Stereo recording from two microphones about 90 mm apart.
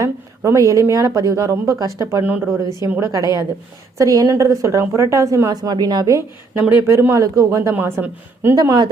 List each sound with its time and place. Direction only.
0.0 s a woman's voice: 35° right (ahead or behind)
2.2 s a woman's voice: 20° right (ahead or behind)
3.0 s a woman's voice: 40° right (ahead or behind)
6.5 s speech: 20° right (ahead or behind)
7.1 s a woman's voice: 40° right (ahead or behind)
7.7 s a woman's voice: 25° right (ahead or behind)
8.5 s speech: 45° right (ahead or behind)